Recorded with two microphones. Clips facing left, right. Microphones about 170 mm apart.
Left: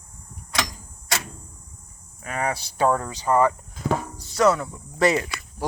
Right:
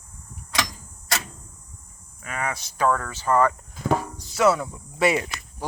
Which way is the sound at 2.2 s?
35° left (ahead or behind).